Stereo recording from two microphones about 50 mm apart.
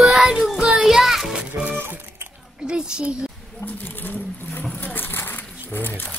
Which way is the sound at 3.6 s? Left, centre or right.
Left.